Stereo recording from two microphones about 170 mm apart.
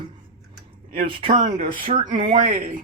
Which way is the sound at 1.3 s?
50° right (ahead or behind).